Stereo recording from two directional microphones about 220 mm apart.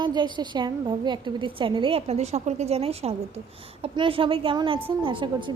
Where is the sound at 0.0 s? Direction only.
20° right (ahead or behind).